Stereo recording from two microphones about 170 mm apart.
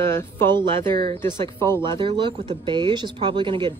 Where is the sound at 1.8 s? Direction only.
30° right (ahead or behind).